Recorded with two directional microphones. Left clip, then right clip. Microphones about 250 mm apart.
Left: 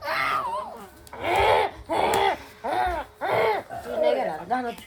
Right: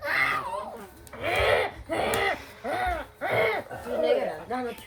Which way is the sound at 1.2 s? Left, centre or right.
Left.